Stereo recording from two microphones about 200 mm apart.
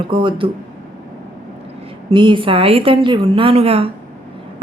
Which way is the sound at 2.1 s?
25° right (ahead or behind).